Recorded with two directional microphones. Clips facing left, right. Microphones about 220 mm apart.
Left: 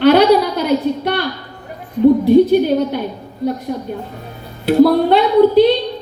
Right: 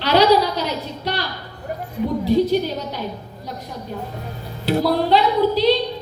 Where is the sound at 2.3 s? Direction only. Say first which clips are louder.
Left 7 dB; 55° left (ahead or behind).